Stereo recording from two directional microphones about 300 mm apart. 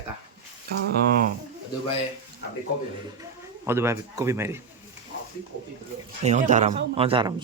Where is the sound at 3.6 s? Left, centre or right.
Centre.